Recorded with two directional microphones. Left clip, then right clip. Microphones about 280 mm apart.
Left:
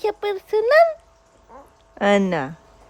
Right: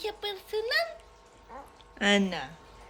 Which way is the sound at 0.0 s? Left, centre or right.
Left.